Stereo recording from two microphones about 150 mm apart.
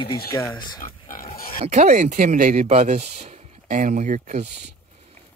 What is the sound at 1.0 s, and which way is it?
Pig, 70° left (ahead or behind).